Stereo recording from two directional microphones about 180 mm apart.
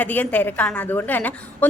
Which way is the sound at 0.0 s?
10° left (ahead or behind).